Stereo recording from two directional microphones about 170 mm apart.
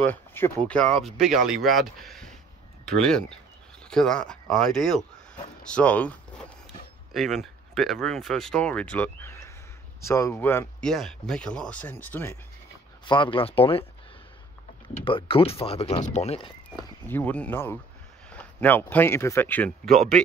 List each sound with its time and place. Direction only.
0.0 s speech: 10° left (ahead or behind)
10.9 s speech: centre (ahead or behind)
13.0 s speech: 30° left (ahead or behind)
15.0 s speech: 30° left (ahead or behind)
17.1 s speech: 10° left (ahead or behind)